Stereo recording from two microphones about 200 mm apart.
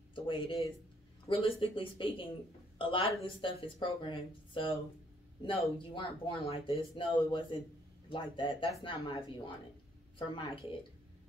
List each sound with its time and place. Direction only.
0.1 s a woman's voice: 25° left (ahead or behind)
5.8 s a woman's voice: 25° left (ahead or behind)